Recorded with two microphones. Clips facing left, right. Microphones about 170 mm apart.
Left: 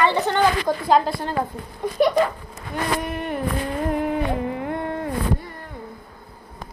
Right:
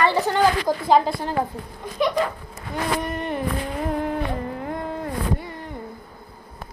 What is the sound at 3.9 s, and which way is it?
Music, 5° left (ahead or behind).